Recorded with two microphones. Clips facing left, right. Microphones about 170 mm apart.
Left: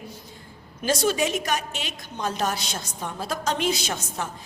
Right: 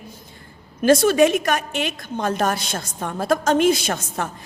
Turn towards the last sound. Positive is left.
turn(degrees=-55)  # may be behind; listen again after turning